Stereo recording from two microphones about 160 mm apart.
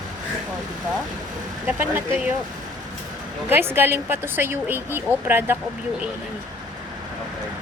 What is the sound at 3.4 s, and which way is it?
Speech, 15° right (ahead or behind).